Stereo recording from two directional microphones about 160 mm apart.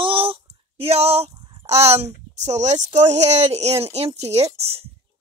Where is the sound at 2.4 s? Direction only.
45° right (ahead or behind).